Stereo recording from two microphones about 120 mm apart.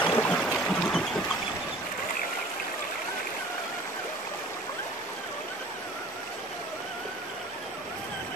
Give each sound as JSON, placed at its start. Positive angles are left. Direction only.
{"t": 0.0, "sound": "stream", "side_deg": 15}